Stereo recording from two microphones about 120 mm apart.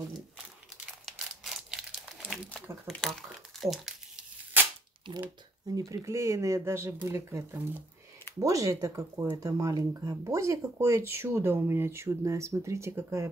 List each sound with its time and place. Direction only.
1.0 s crumpling: 5° right (ahead or behind)
5.1 s speech: 40° right (ahead or behind)
5.7 s speech: 30° right (ahead or behind)